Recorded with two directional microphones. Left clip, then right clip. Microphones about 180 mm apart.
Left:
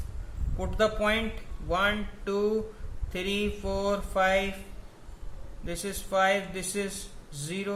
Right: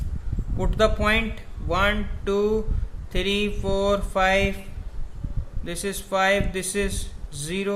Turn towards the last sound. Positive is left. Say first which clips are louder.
# right 6 dB
turn(degrees=-30)  # may be behind; listen again after turning